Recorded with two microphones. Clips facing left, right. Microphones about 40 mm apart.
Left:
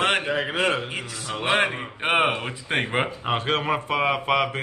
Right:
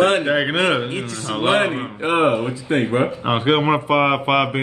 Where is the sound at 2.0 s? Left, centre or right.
Left.